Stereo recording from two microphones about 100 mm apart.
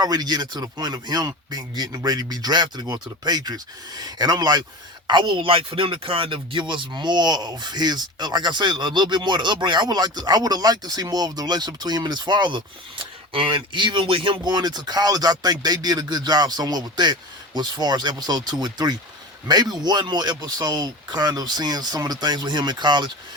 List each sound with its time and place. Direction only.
0.0 s speech: 40° right (ahead or behind)
5.0 s speech: 50° right (ahead or behind)
14.4 s speech: 45° right (ahead or behind)